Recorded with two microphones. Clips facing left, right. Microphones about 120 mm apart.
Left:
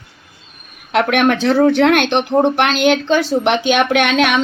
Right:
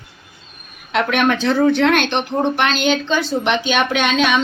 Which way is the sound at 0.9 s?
70° left (ahead or behind).